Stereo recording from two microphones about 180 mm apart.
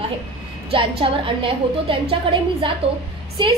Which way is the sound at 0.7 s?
30° right (ahead or behind).